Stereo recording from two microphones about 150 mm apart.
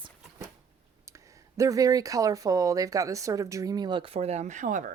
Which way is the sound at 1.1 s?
20° right (ahead or behind).